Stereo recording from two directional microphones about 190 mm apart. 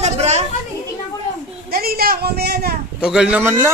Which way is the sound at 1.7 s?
50° right (ahead or behind).